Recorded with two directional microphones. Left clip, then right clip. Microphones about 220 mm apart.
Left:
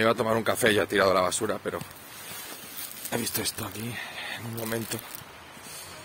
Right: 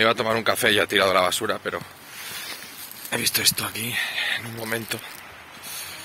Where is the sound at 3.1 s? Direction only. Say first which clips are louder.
Right 9 dB; 15° left (ahead or behind).